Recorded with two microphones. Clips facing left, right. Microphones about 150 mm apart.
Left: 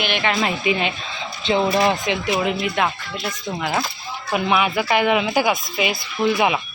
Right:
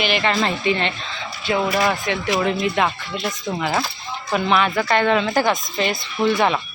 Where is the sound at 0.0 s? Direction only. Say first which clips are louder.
Right 2 dB; centre (ahead or behind).